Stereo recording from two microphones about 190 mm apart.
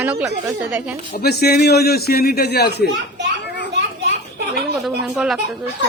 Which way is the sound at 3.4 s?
60° left (ahead or behind).